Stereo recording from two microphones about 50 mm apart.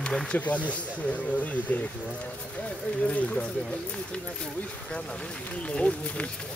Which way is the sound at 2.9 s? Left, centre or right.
Left.